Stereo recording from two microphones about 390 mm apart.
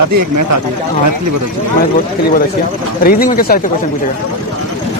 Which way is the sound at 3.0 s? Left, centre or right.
Left.